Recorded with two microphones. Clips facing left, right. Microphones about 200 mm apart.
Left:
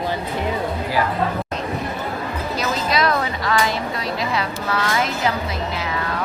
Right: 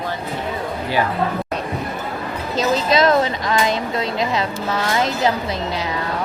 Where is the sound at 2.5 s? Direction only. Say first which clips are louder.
Right 6 dB; 25° right (ahead or behind).